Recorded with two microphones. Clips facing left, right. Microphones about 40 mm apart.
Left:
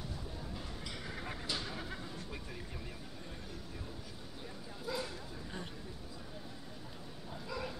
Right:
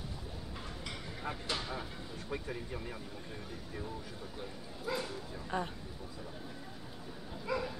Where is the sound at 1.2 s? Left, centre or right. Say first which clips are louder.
Right 4 dB; centre.